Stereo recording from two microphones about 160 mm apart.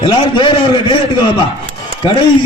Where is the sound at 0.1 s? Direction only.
30° left (ahead or behind).